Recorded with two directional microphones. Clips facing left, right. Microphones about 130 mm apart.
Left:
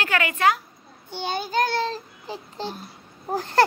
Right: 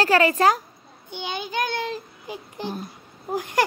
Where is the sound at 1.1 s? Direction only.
15° right (ahead or behind).